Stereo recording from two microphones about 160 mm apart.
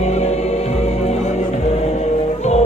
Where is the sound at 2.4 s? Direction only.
45° left (ahead or behind).